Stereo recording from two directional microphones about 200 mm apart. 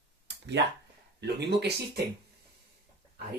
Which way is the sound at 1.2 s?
55° right (ahead or behind).